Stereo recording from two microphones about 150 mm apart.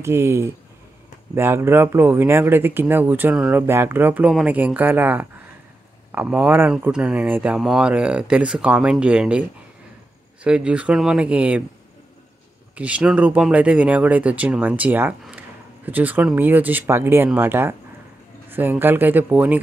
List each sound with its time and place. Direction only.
0.0 s speech: 15° right (ahead or behind)
12.7 s speech: 10° right (ahead or behind)